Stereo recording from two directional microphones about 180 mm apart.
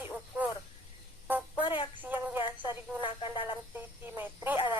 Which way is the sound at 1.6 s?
30° left (ahead or behind).